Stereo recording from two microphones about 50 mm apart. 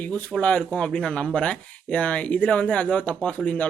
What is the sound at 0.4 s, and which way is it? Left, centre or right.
Speech, left.